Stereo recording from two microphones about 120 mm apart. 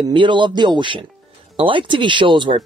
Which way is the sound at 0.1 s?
40° right (ahead or behind).